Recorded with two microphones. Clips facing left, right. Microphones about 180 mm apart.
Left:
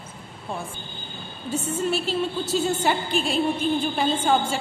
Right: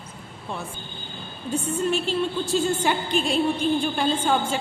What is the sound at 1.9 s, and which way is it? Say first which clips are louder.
Speech: right 1 dB; 40° left (ahead or behind).